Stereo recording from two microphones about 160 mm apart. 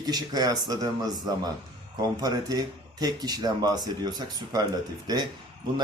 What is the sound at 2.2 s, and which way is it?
A man's voice, 25° right (ahead or behind).